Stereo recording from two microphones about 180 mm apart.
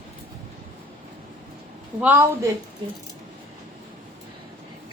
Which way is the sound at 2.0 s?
10° right (ahead or behind).